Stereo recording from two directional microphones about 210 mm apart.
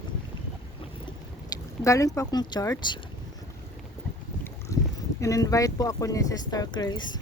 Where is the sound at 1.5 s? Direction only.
15° left (ahead or behind).